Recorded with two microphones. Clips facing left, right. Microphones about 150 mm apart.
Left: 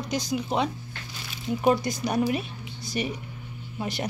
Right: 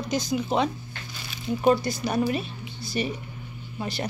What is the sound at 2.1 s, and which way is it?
Speech, 15° left (ahead or behind).